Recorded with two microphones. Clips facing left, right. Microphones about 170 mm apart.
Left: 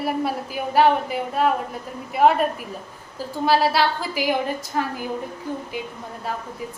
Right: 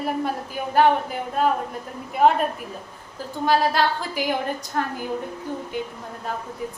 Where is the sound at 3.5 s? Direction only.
5° left (ahead or behind).